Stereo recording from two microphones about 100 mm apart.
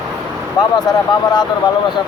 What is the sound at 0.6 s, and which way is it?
Speech, 45° left (ahead or behind).